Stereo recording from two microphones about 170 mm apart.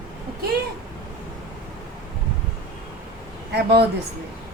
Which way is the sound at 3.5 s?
70° right (ahead or behind).